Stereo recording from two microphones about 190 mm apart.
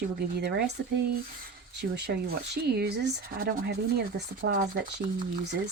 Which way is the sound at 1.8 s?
55° right (ahead or behind).